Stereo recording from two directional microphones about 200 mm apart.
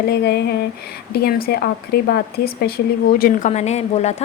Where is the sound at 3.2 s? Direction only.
40° left (ahead or behind).